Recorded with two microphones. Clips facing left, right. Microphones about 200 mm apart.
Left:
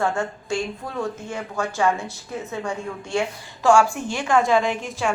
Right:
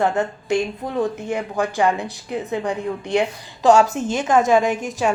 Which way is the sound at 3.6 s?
20° right (ahead or behind).